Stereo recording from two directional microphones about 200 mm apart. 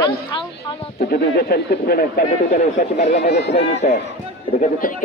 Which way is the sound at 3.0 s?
55° left (ahead or behind).